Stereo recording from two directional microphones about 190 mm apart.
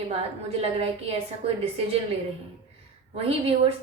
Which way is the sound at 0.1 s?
30° right (ahead or behind).